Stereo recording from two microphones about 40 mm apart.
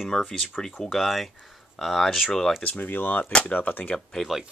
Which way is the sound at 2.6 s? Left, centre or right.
Left.